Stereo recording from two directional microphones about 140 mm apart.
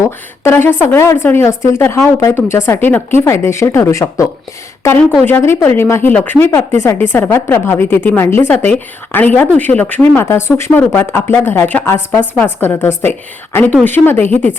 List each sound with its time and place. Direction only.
0.0 s speech: 20° left (ahead or behind)